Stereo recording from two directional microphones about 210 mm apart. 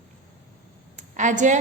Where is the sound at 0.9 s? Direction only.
35° right (ahead or behind).